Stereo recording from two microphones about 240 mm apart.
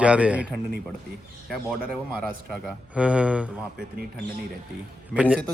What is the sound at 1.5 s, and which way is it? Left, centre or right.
A man's voice, centre.